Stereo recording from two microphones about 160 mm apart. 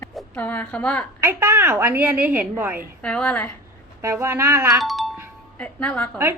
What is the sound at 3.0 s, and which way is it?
Speech, 5° left (ahead or behind).